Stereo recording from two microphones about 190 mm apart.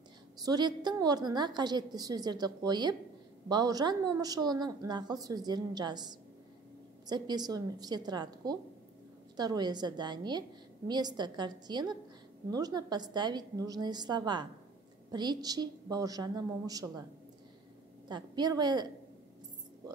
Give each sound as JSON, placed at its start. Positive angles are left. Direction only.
{"t": 0.4, "sound": "a woman's voice", "side_deg": -20}
{"t": 18.0, "sound": "a woman's voice", "side_deg": -20}